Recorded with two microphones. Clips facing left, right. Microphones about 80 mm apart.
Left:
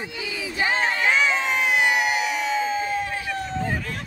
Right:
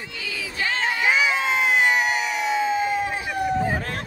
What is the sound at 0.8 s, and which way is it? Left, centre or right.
Crowd, centre.